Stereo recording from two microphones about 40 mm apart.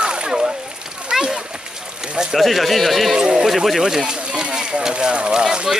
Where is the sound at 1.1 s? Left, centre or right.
Centre.